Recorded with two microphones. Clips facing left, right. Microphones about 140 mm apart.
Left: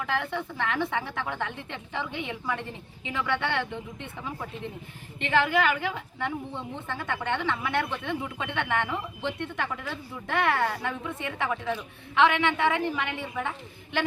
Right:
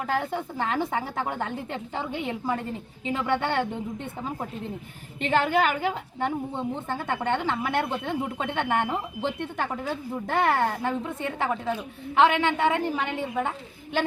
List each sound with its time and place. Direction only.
0.0 s a woman's voice: 40° right (ahead or behind)
5.5 s a woman's voice: 45° right (ahead or behind)